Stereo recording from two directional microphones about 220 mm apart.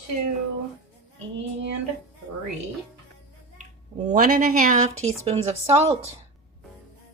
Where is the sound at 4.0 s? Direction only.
35° right (ahead or behind).